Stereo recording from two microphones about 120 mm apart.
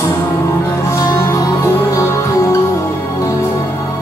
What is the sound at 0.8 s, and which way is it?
Music, 25° left (ahead or behind).